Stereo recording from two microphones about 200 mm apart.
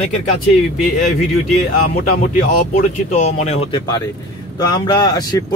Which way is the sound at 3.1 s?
35° left (ahead or behind).